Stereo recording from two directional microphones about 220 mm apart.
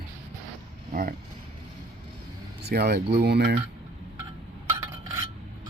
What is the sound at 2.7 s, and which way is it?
Speech, 45° right (ahead or behind).